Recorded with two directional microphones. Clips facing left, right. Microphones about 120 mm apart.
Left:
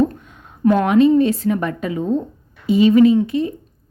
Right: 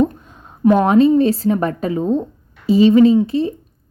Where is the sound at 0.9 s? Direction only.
35° right (ahead or behind).